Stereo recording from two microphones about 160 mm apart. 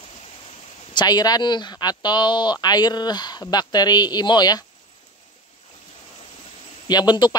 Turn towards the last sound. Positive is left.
turn(degrees=25)  # may be behind; listen again after turning